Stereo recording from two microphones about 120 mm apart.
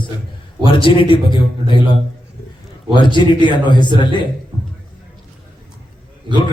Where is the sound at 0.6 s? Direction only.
45° left (ahead or behind).